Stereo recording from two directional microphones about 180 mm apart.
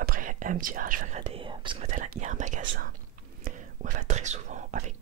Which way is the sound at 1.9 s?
40° right (ahead or behind).